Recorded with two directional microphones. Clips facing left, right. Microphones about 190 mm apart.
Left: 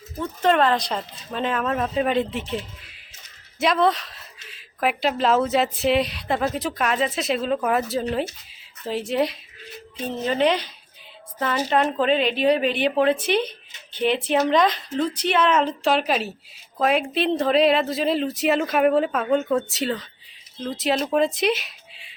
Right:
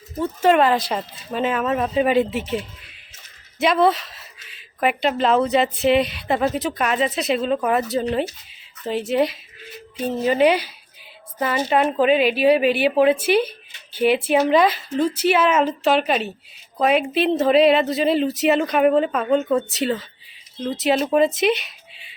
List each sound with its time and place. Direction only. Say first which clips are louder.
0.2 s a woman's voice: right 3 dB; 5° right (ahead or behind)